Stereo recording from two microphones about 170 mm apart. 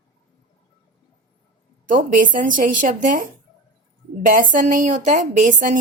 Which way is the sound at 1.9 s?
50° right (ahead or behind).